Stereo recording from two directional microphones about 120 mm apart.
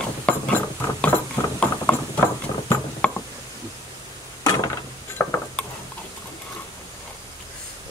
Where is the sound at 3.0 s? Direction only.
10° left (ahead or behind).